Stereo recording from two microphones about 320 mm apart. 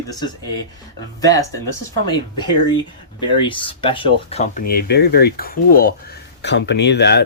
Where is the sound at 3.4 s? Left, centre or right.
Centre.